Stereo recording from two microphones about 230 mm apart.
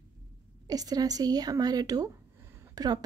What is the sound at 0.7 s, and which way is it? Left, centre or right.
A woman's voice, centre.